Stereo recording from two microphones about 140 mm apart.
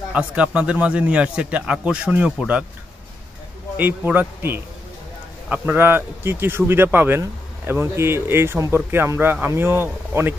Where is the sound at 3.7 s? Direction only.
15° right (ahead or behind).